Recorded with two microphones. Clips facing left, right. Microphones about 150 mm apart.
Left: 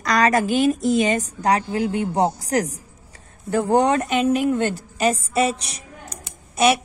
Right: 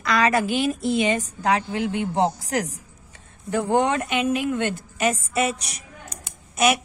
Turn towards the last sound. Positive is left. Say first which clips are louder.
# left 3 dB
turn(degrees=30)  # may be behind; listen again after turning